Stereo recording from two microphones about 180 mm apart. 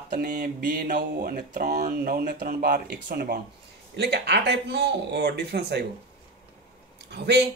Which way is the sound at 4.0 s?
65° right (ahead or behind).